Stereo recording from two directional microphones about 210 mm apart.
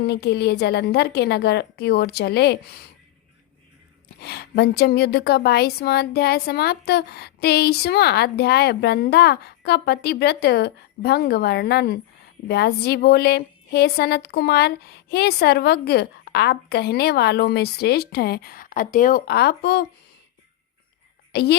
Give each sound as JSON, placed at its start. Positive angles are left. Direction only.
{"t": 0.1, "sound": "a woman's voice", "side_deg": 50}
{"t": 4.2, "sound": "a woman's voice", "side_deg": 50}
{"t": 21.3, "sound": "a woman's voice", "side_deg": 50}